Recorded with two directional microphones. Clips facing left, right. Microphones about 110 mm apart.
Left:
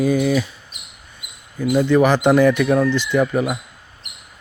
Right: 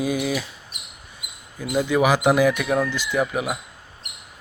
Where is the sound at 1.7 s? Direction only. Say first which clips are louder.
Left 4 dB; 10° right (ahead or behind).